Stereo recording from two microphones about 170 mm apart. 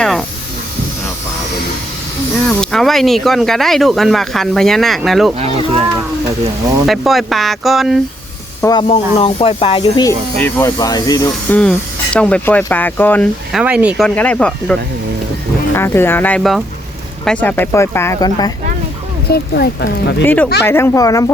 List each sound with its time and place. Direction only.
0.0 s hiss: centre (ahead or behind)
2.5 s speech: 5° left (ahead or behind)
6.8 s speech: centre (ahead or behind)
8.6 s speech: 25° left (ahead or behind)
10.0 s speech: 15° left (ahead or behind)
11.5 s speech: 10° left (ahead or behind)
13.5 s speech: 5° right (ahead or behind)
14.2 s speech: 5° left (ahead or behind); by 18.5 s 20° left (ahead or behind)
19.3 s speech: 70° left (ahead or behind); by 20.2 s 90° left
20.2 s speech: 10° left (ahead or behind)